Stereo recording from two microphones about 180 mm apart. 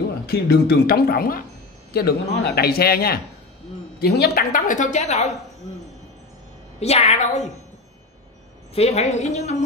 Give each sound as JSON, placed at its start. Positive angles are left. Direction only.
{"t": 0.3, "sound": "a woman's voice", "side_deg": 60}
{"t": 6.8, "sound": "a woman's voice", "side_deg": 35}
{"t": 8.7, "sound": "a woman's voice", "side_deg": 35}